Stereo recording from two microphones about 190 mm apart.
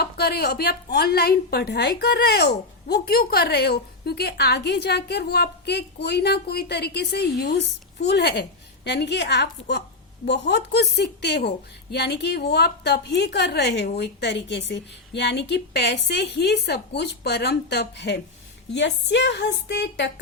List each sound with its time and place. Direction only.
0.0 s a woman's voice: 55° left (ahead or behind)